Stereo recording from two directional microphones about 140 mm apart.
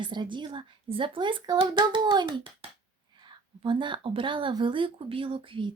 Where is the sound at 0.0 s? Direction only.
35° right (ahead or behind).